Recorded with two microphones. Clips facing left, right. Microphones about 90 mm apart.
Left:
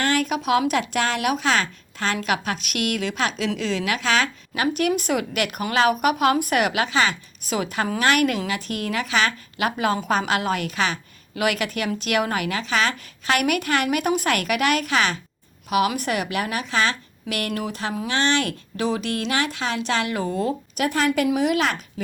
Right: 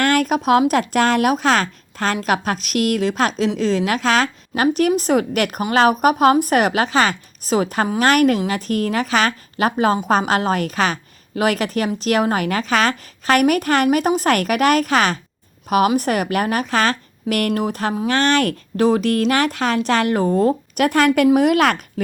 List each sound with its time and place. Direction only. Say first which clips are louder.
0.0 s a sound: right 5 dB; 50° right (ahead or behind)
0.7 s a woman's voice: right 6 dB; 45° right (ahead or behind)
20.7 s speech: right 5 dB; 60° right (ahead or behind)